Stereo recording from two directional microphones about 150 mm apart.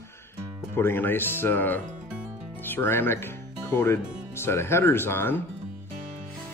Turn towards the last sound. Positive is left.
turn(degrees=15)  # may be behind; listen again after turning